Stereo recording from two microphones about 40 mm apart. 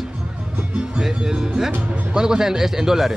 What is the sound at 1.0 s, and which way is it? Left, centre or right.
Speech, centre.